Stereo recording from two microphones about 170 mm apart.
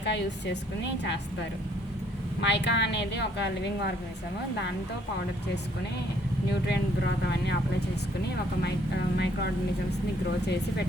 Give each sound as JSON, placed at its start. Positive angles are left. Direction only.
{"t": 0.0, "sound": "speech", "side_deg": 90}
{"t": 2.4, "sound": "speech", "side_deg": 90}
{"t": 9.1, "sound": "speech", "side_deg": 75}